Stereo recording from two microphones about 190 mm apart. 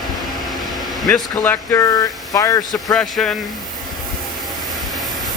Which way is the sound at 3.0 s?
5° left (ahead or behind).